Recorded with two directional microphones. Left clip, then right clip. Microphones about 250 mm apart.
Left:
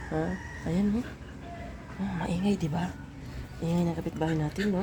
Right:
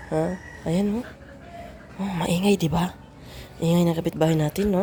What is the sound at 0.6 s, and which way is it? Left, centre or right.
Speech, right.